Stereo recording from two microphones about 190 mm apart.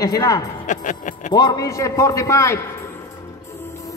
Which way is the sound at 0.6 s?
40° left (ahead or behind).